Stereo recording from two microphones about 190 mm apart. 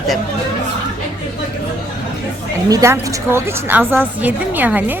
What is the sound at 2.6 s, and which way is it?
A woman's voice, 15° right (ahead or behind).